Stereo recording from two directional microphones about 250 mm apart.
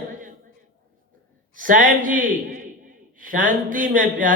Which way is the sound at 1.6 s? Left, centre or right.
Right.